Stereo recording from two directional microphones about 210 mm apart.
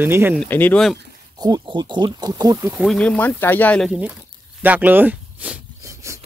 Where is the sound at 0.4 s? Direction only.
10° left (ahead or behind).